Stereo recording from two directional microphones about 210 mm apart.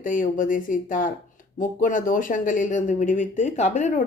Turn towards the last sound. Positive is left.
turn(degrees=35)  # may be behind; listen again after turning